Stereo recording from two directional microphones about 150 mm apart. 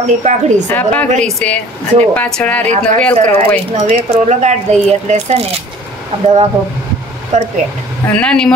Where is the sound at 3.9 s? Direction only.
45° right (ahead or behind).